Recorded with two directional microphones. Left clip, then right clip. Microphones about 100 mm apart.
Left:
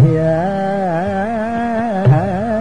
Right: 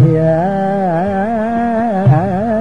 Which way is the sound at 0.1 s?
35° left (ahead or behind).